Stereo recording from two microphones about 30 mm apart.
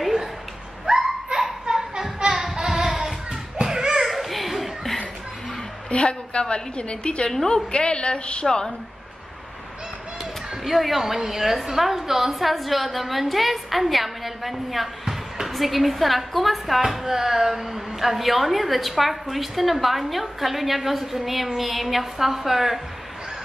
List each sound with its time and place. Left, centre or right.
0.8 s a sound: centre
2.3 s child singing: centre
2.6 s carnatic music: centre
3.6 s children playing: right
4.0 s a sound: centre
5.9 s a sound: left
6.5 s a woman's voice: left
8.5 s a woman's voice: left
10.6 s a woman's voice: centre
17.0 s a woman's voice: centre